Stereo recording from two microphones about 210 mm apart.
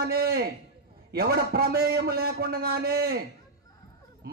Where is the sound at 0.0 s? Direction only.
50° right (ahead or behind).